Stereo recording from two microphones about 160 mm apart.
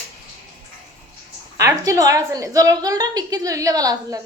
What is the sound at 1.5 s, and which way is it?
A woman's voice, 20° right (ahead or behind).